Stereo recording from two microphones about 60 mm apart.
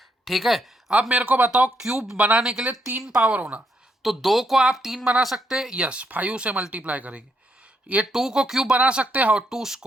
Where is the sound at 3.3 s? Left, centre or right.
Right.